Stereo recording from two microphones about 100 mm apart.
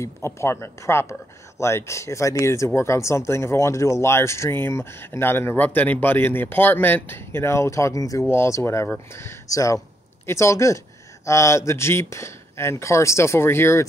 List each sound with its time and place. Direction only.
0.0 s speech: 25° left (ahead or behind)